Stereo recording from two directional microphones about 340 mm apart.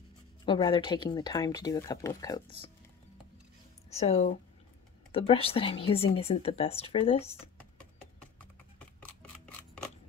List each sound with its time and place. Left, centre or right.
0.5 s speech: centre
3.9 s speech: centre
8.7 s camera: centre